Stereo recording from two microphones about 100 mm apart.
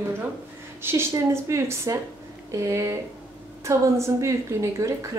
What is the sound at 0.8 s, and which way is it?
A woman's voice, 25° right (ahead or behind).